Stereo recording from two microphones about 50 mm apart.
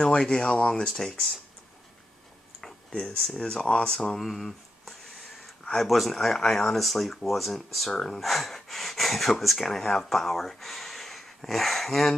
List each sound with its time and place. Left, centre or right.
0.0 s speech: centre
2.6 s a sound: centre
5.9 s speech: centre
7.9 s speech: centre
8.2 s speech: centre